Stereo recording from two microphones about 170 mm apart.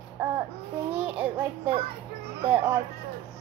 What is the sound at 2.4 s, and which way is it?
Speech, 35° right (ahead or behind).